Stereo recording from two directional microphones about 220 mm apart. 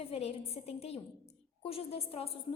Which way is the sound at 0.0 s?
25° left (ahead or behind).